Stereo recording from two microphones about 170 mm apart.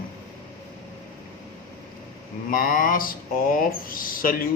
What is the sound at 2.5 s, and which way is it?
Speech, 55° left (ahead or behind).